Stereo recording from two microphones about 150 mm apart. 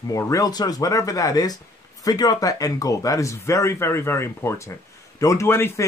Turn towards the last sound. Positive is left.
turn(degrees=15)  # may be behind; listen again after turning